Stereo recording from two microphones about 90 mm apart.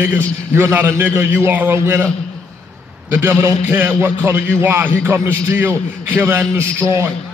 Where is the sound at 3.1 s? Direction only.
30° right (ahead or behind).